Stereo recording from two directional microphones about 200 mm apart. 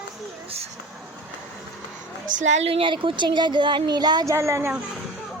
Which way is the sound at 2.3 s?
40° right (ahead or behind).